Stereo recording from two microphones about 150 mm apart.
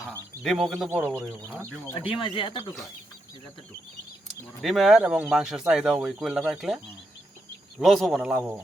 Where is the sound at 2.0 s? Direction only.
35° left (ahead or behind).